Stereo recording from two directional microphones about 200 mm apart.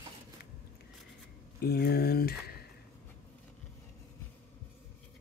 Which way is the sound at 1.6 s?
50° left (ahead or behind).